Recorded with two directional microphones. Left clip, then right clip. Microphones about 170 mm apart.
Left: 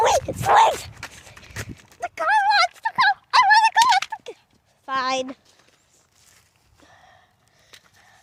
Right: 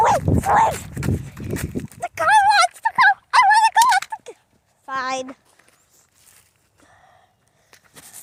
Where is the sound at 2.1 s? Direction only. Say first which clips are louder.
Right 4 dB; 30° right (ahead or behind).